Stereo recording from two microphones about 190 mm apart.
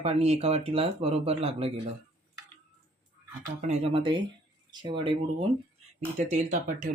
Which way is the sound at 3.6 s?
30° right (ahead or behind).